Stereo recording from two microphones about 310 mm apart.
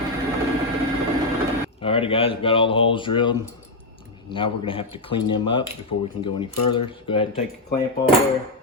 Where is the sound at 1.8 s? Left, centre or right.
Centre.